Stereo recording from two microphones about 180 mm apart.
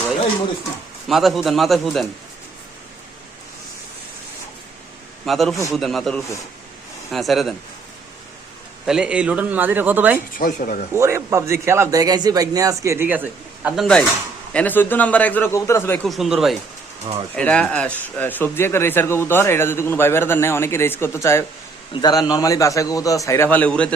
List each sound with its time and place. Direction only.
1.0 s a man's voice: centre (ahead or behind)
5.2 s a man's voice: centre (ahead or behind)
8.9 s speech: 5° right (ahead or behind)
10.3 s speech: 50° left (ahead or behind)
10.9 s speech: 15° right (ahead or behind)
13.7 s a man's voice: centre (ahead or behind)
16.0 s a man's voice: centre (ahead or behind)